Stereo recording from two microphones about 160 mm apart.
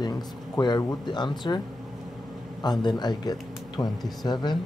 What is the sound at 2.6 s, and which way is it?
Speech, 25° left (ahead or behind).